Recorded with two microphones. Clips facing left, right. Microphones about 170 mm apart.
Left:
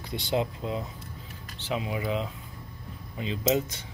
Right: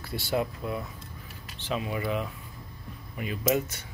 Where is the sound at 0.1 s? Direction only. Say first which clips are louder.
Left 1 dB; 20° left (ahead or behind).